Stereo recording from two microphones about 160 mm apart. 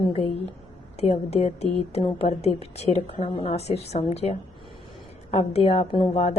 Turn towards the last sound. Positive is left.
turn(degrees=40)  # may be behind; listen again after turning